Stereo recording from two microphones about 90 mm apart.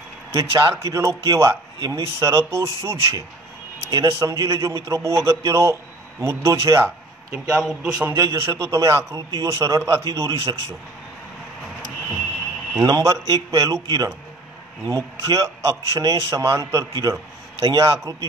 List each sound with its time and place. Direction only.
0.3 s a man's voice: 35° right (ahead or behind)
7.5 s a man's voice: 10° right (ahead or behind)
8.0 s a man's voice: 35° right (ahead or behind)
12.8 s a man's voice: 40° right (ahead or behind)